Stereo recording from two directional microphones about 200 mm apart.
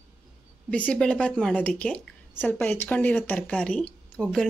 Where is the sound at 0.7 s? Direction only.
5° left (ahead or behind).